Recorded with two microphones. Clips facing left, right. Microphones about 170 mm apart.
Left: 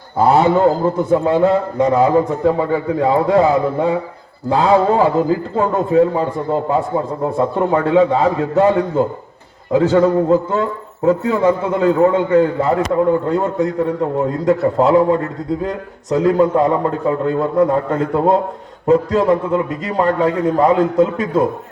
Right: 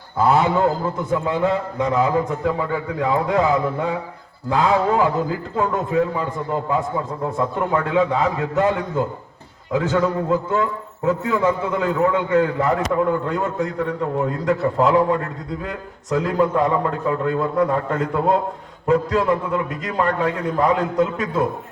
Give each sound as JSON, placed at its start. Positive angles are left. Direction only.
{"t": 0.2, "sound": "a man's voice", "side_deg": 35}